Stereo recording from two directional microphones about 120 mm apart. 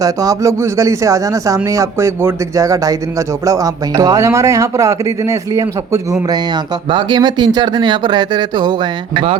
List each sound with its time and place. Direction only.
0.0 s speech: 30° right (ahead or behind)
6.9 s speech: 40° right (ahead or behind)